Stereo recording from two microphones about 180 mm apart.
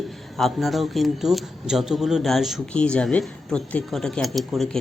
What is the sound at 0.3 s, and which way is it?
Speech, centre (ahead or behind).